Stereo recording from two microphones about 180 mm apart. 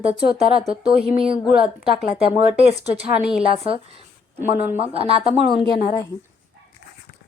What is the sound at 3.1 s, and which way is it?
Speech, 5° right (ahead or behind).